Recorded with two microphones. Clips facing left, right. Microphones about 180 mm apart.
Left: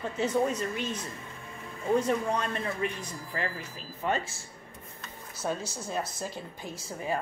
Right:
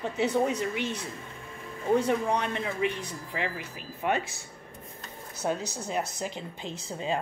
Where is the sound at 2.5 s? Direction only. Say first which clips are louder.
Right 2 dB; 10° right (ahead or behind).